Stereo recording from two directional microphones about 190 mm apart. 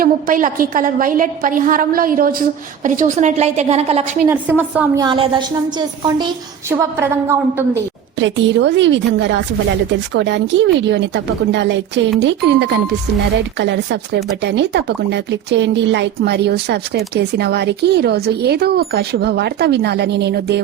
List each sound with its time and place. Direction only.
0.0 s a woman's voice: 45° right (ahead or behind); by 5.4 s 25° right (ahead or behind)
6.7 s a woman's voice: 15° right (ahead or behind)
8.2 s a woman's voice: 70° right (ahead or behind)